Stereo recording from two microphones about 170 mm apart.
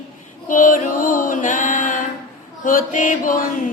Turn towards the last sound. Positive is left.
turn(degrees=50)  # may be behind; listen again after turning